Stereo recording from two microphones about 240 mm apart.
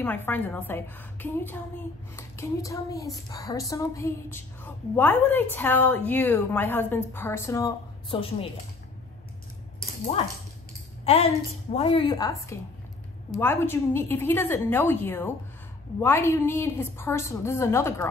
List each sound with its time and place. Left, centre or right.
0.0 s a woman's voice: centre
11.1 s a woman's voice: left